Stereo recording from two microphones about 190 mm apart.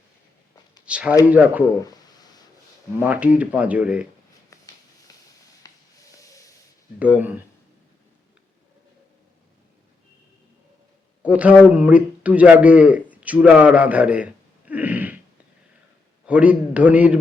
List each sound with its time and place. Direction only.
0.9 s speech: 5° right (ahead or behind)
1.8 s a sound: 20° left (ahead or behind)
3.0 s speech: 10° right (ahead or behind)
5.6 s a sound: 20° left (ahead or behind)
7.2 s speech: 10° right (ahead or behind)
11.2 s a man's voice: 5° right (ahead or behind)
16.2 s speech: 5° right (ahead or behind)